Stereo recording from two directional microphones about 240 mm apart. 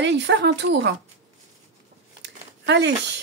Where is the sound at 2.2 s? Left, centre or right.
Right.